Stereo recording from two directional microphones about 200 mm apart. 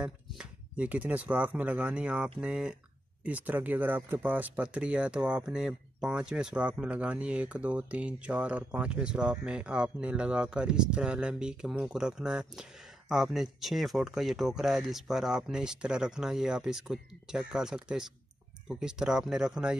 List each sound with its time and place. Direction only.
0.0 s speech: 5° right (ahead or behind)